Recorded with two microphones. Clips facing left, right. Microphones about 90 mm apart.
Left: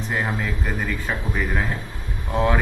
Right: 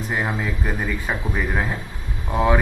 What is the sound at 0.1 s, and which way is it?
Speech, 15° right (ahead or behind).